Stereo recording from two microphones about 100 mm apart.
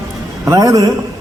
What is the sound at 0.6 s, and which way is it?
Speech, 35° right (ahead or behind).